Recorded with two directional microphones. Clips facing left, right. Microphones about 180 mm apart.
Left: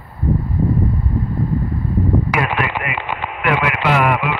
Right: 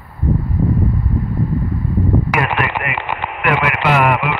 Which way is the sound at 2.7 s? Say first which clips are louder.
Right 1 dB; 60° right (ahead or behind).